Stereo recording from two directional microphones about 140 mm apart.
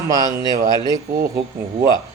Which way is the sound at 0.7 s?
30° left (ahead or behind).